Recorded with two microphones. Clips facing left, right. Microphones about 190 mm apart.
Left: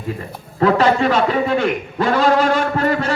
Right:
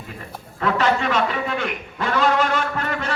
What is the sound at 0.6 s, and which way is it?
A man's voice, 35° left (ahead or behind).